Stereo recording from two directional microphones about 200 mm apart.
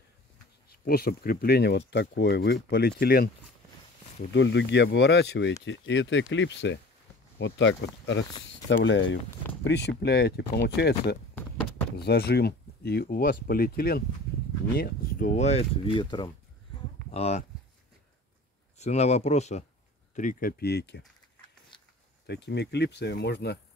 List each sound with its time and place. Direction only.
0.7 s speech: 50° left (ahead or behind)
4.3 s speech: 65° left (ahead or behind); by 17.5 s 35° left (ahead or behind)
18.8 s speech: 35° left (ahead or behind); by 21.0 s 55° left (ahead or behind)
22.2 s speech: 55° left (ahead or behind)